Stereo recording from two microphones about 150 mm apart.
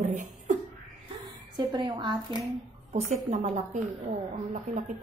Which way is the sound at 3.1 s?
50° right (ahead or behind).